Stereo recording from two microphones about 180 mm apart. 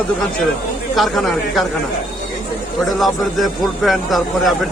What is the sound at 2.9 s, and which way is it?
A man's voice, centre (ahead or behind).